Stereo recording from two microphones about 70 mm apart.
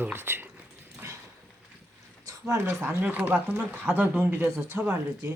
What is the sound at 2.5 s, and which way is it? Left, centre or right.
Speech, right.